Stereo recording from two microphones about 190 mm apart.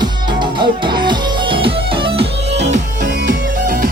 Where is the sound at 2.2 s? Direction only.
65° right (ahead or behind).